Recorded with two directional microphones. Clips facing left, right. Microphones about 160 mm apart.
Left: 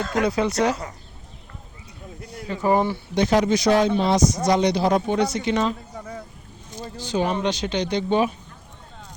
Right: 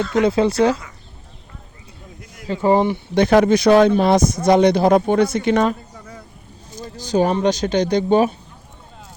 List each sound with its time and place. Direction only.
0.2 s speech: 25° right (ahead or behind)
2.5 s speech: 25° right (ahead or behind)
3.2 s speech: 55° right (ahead or behind)
6.8 s speech: 40° right (ahead or behind)